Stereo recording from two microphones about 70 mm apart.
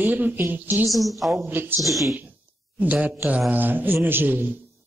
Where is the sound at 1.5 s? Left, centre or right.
Right.